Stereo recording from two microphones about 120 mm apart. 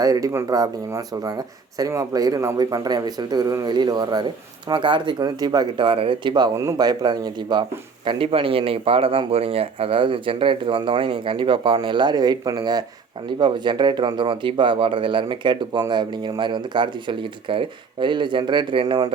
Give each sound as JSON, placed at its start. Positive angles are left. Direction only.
{"t": 0.0, "sound": "speech", "side_deg": -30}
{"t": 6.6, "sound": "a man's voice", "side_deg": -30}